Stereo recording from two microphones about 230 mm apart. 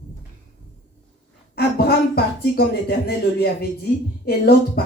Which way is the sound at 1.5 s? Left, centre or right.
Left.